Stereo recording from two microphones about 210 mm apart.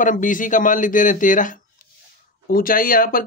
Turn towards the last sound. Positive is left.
turn(degrees=45)  # may be behind; listen again after turning